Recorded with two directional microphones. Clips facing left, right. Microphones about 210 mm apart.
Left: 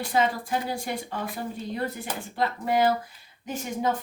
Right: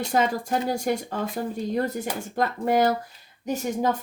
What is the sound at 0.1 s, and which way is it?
Speech, 45° right (ahead or behind).